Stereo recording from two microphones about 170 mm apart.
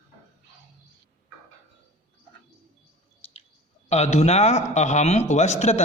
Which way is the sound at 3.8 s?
40° left (ahead or behind).